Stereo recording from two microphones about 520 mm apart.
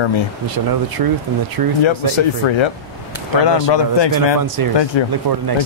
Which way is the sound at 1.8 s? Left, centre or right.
Left.